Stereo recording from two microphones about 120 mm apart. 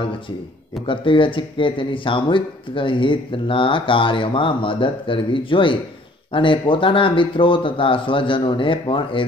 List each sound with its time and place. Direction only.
0.8 s speech: 45° left (ahead or behind)